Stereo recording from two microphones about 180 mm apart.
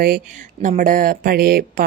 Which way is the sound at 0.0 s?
50° right (ahead or behind).